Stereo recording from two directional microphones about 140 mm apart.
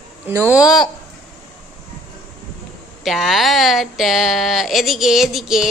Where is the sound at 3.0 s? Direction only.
Centre (ahead or behind).